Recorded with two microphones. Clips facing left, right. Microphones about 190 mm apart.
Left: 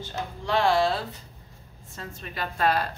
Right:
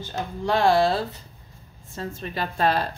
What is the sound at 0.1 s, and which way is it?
Speech, 40° right (ahead or behind).